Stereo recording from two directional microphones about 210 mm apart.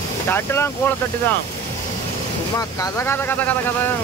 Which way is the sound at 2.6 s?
15° left (ahead or behind).